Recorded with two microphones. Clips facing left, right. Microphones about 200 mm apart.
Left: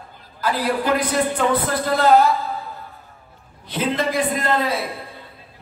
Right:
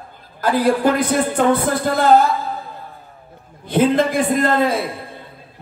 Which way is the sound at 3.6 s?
50° right (ahead or behind).